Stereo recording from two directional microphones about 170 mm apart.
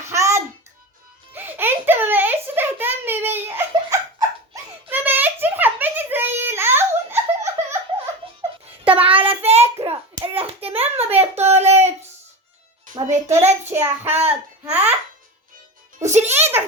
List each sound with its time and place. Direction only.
0.0 s music: 15° right (ahead or behind)
1.3 s a sound: 10° right (ahead or behind)
8.4 s music: 30° right (ahead or behind)
13.7 s child singing: 15° right (ahead or behind)
14.3 s a sound: 10° right (ahead or behind)
16.0 s a child's voice: 45° right (ahead or behind)
16.3 s child singing: 10° right (ahead or behind)